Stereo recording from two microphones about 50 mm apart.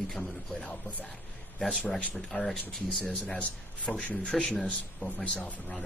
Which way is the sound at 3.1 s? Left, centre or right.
Left.